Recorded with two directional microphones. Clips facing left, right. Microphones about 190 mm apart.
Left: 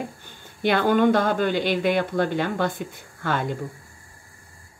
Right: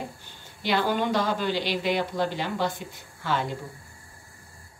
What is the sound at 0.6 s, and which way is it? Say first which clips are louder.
Speech: left 6 dB; 55° left (ahead or behind).